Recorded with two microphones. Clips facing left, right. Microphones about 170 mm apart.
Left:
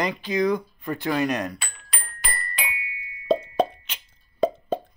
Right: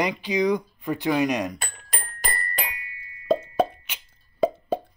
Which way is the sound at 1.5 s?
45° right (ahead or behind).